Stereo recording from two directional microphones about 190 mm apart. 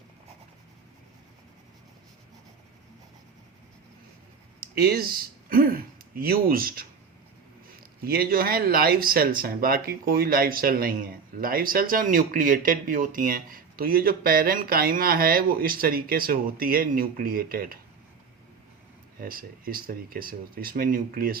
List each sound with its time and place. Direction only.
4.6 s speech: 55° right (ahead or behind)
19.2 s speech: 50° right (ahead or behind)